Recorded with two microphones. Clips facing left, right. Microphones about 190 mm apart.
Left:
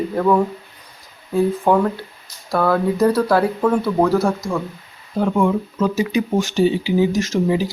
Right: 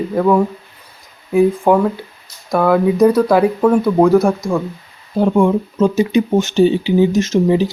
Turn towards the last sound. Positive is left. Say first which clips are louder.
# right 5 dB
turn(degrees=-25)  # may be behind; listen again after turning